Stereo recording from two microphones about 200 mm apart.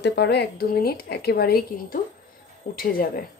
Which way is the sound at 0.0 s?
60° left (ahead or behind).